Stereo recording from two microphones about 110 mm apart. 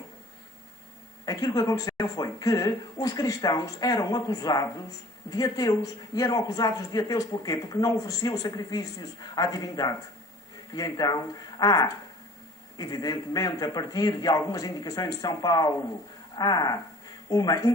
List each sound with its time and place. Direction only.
1.2 s a man's voice: 35° left (ahead or behind)